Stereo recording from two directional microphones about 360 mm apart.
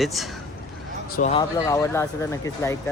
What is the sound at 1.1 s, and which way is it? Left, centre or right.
Speech, centre.